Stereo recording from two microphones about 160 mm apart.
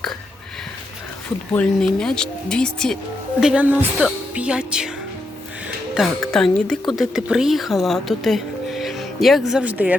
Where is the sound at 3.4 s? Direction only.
5° right (ahead or behind).